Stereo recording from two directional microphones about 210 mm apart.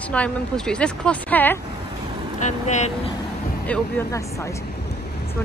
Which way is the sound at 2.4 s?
35° left (ahead or behind).